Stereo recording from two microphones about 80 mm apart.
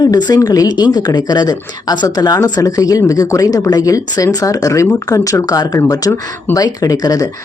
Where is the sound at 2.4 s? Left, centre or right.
Left.